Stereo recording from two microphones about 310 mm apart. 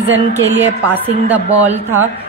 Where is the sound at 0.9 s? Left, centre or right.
Centre.